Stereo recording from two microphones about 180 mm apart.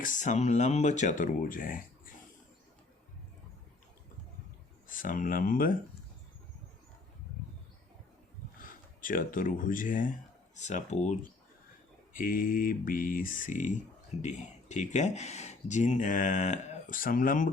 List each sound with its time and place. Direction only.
0.0 s speech: 45° left (ahead or behind)
4.9 s speech: 50° left (ahead or behind)
9.0 s speech: 50° left (ahead or behind)
12.1 s speech: 50° left (ahead or behind)